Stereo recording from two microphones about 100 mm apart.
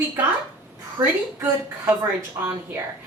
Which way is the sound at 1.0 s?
40° right (ahead or behind).